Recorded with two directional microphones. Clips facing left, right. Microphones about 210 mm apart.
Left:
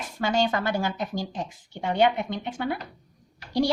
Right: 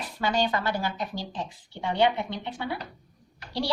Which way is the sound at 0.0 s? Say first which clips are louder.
Left 2 dB; 45° left (ahead or behind).